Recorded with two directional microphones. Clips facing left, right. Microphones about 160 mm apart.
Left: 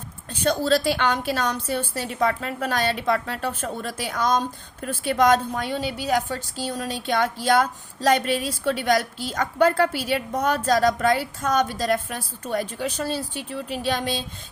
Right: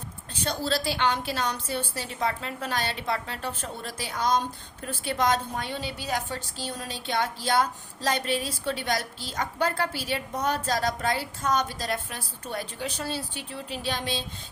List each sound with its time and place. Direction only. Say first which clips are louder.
0.4 s a woman's voice: left 8 dB; 50° left (ahead or behind)